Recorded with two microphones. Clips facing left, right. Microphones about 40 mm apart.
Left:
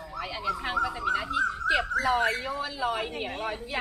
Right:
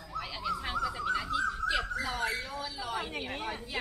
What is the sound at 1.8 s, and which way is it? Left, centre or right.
Speech, left.